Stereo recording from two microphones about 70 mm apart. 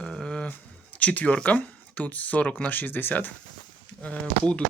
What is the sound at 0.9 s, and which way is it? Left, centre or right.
Speech, left.